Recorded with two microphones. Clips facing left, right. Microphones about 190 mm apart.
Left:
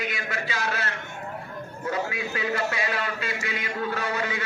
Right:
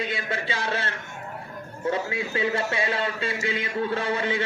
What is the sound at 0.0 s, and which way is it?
A man's voice, 30° right (ahead or behind).